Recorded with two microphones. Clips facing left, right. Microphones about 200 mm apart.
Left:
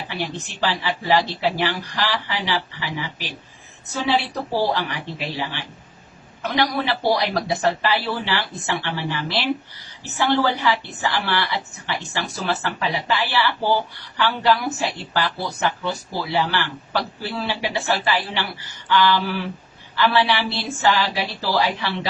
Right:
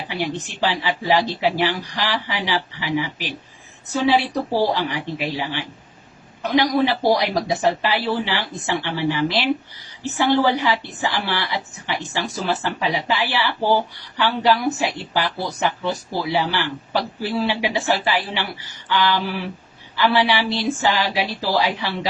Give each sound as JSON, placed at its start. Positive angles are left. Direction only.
{"t": 0.1, "sound": "speech", "side_deg": -15}
{"t": 4.5, "sound": "speech", "side_deg": -15}